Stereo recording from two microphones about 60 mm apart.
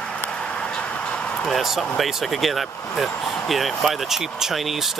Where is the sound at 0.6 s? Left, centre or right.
Centre.